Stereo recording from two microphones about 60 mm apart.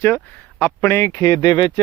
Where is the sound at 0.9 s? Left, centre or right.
Left.